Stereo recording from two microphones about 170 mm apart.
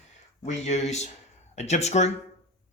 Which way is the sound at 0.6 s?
40° left (ahead or behind).